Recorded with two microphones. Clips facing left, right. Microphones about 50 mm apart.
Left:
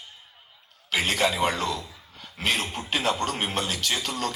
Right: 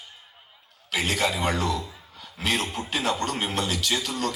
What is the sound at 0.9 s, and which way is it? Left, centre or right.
Speech, left.